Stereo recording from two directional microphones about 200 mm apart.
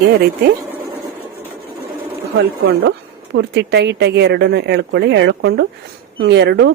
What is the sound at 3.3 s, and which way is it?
A woman's voice, 60° right (ahead or behind).